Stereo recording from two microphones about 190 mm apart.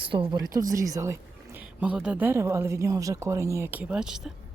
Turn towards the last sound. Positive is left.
turn(degrees=-5)  # may be behind; listen again after turning